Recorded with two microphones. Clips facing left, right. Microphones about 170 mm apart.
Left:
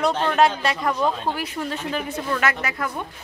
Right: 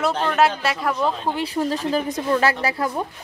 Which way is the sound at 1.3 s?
30° right (ahead or behind).